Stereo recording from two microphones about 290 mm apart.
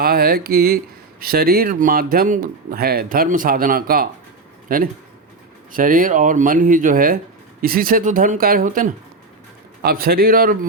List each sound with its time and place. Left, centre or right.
0.0 s speech: right